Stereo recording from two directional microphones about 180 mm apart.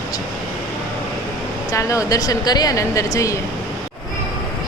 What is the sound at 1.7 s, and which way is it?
Speech, 15° left (ahead or behind).